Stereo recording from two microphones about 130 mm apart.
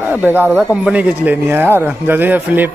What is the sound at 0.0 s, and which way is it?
A man's voice, 15° right (ahead or behind).